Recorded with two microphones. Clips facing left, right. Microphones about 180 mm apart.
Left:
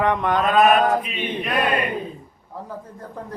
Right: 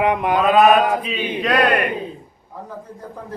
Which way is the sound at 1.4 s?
85° right.